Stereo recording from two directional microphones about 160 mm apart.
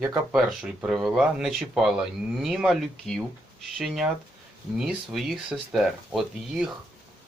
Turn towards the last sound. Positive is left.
turn(degrees=0)  # may be behind; listen again after turning